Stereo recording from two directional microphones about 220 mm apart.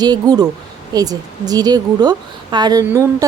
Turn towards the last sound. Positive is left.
turn(degrees=-10)  # may be behind; listen again after turning